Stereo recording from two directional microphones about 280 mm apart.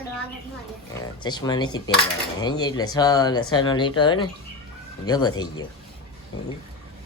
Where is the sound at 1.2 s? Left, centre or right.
Centre.